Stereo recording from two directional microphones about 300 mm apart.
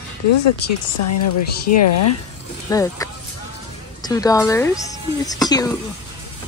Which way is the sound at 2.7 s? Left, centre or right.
Centre.